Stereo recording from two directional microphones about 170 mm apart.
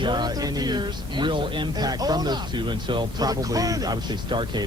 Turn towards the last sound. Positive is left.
turn(degrees=-25)  # may be behind; listen again after turning